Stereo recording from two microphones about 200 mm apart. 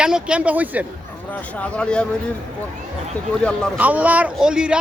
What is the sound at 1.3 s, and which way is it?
Speech, 5° left (ahead or behind).